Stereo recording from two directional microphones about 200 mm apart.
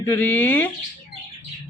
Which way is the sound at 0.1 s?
10° left (ahead or behind).